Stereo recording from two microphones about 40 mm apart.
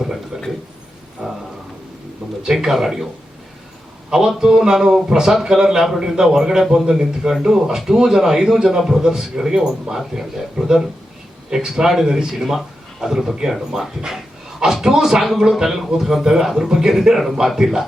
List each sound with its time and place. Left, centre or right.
1.2 s speech: right
2.7 s speech: centre
4.4 s a man's voice: centre